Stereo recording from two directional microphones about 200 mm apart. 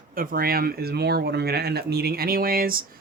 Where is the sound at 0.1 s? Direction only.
45° right (ahead or behind).